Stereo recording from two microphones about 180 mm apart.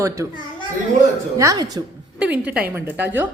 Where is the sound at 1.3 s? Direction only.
20° right (ahead or behind).